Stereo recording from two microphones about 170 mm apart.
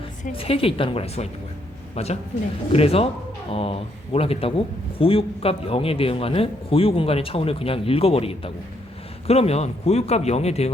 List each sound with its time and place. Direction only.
0.3 s a man's voice: 35° left (ahead or behind)